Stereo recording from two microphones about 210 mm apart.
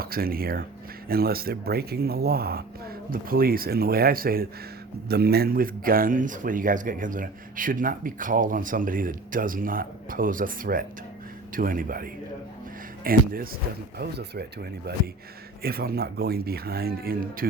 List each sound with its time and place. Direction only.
0.0 s speech: 45° right (ahead or behind)